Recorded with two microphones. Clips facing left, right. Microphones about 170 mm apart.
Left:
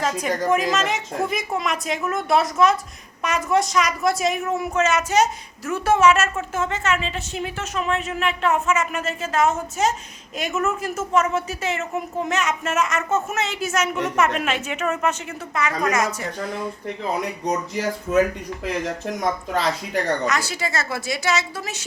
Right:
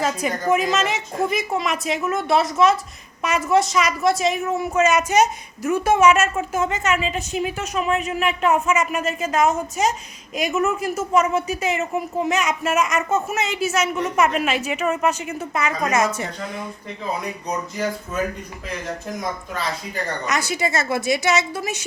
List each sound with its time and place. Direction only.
0.0 s a woman's voice: 5° right (ahead or behind)
4.8 s a woman's voice: 15° right (ahead or behind)
15.5 s a woman's voice: 25° right (ahead or behind)
20.2 s a woman's voice: 20° right (ahead or behind)